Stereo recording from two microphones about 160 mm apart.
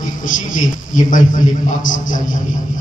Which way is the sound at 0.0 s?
55° left (ahead or behind).